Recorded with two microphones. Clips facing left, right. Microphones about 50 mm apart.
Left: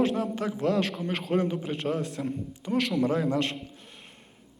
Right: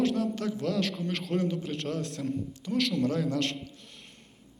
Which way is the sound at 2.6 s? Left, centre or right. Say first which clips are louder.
Left 2 dB; centre.